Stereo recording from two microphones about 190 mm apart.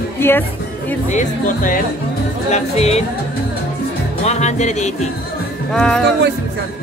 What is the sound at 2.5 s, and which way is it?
Music, 35° left (ahead or behind).